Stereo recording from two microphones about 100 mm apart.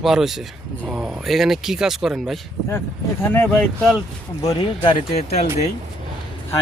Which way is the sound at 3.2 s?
20° left (ahead or behind).